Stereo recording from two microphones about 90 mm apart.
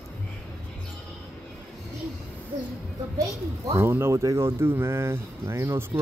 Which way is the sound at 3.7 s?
30° right (ahead or behind).